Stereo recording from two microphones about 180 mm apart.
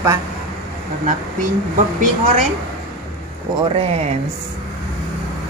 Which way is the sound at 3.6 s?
35° right (ahead or behind).